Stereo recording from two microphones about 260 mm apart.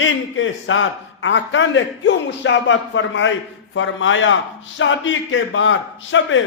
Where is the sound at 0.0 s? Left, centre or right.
Left.